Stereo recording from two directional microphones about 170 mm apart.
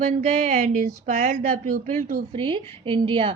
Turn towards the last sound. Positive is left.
turn(degrees=-30)  # may be behind; listen again after turning